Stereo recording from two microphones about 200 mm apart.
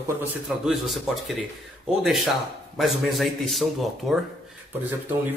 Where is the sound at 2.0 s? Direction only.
Centre (ahead or behind).